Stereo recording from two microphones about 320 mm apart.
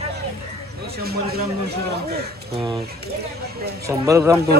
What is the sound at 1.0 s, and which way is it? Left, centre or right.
Speech, right.